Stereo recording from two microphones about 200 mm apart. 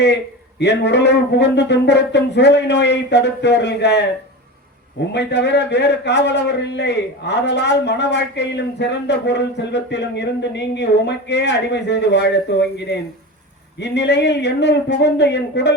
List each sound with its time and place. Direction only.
0.6 s a man's voice: 60° left (ahead or behind)
5.1 s a man's voice: 60° left (ahead or behind)